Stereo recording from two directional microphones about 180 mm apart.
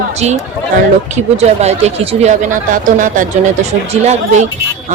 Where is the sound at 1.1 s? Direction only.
35° right (ahead or behind).